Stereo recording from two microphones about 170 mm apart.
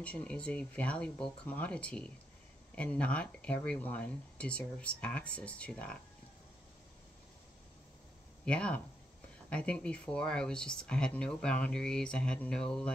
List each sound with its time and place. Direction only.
0.0 s speech: 5° left (ahead or behind)
8.5 s speech: 5° left (ahead or behind)